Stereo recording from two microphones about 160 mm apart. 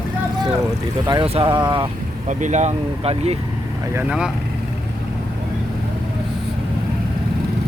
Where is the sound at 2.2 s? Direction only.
50° right (ahead or behind).